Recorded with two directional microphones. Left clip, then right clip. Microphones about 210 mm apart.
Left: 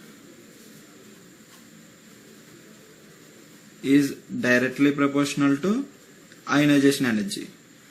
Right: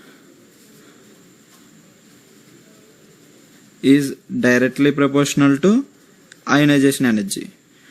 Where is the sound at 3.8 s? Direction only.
40° right (ahead or behind).